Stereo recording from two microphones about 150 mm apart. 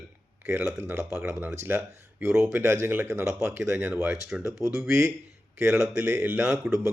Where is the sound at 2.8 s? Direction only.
15° right (ahead or behind).